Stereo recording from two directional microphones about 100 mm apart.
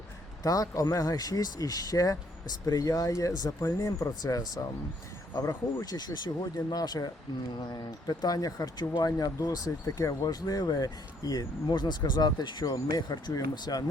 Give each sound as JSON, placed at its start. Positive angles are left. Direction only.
{"t": 0.4, "sound": "speech", "side_deg": 35}